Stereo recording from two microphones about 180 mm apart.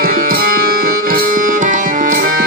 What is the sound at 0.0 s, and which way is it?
Music, 55° right (ahead or behind).